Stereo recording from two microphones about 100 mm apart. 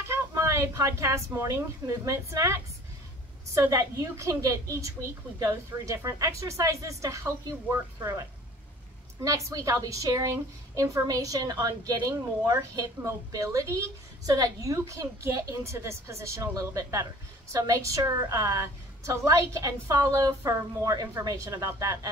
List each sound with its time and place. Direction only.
0.1 s a woman's voice: 30° right (ahead or behind)